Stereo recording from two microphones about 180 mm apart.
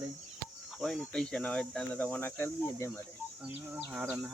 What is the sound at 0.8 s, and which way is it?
Speech, 5° left (ahead or behind).